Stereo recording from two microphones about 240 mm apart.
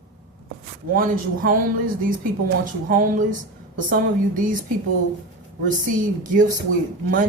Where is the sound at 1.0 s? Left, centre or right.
Right.